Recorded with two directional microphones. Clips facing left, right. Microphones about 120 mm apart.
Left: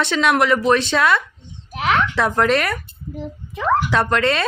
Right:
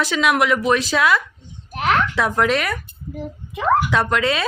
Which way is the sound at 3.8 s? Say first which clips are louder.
Left 1 dB; centre (ahead or behind).